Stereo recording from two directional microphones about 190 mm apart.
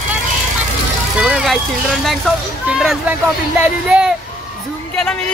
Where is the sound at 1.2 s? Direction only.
5° right (ahead or behind).